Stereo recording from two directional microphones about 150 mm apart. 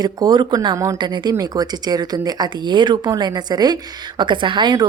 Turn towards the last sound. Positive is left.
turn(degrees=-30)  # may be behind; listen again after turning